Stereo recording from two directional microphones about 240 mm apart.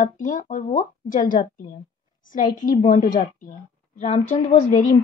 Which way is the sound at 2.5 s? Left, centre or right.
Left.